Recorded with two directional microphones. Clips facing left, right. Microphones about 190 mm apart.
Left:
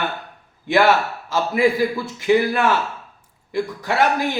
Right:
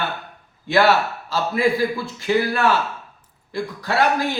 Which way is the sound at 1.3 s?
15° left (ahead or behind).